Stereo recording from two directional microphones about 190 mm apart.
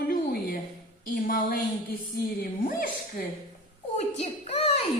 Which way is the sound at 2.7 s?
50° left (ahead or behind).